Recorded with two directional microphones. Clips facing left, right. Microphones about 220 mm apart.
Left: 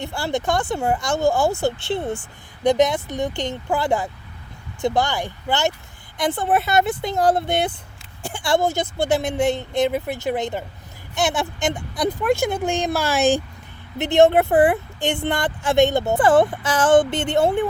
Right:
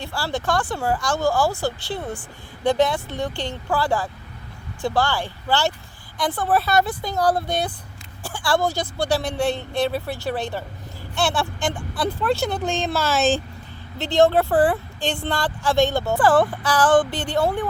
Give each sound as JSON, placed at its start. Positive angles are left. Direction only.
{"t": 0.0, "sound": "speech", "side_deg": 20}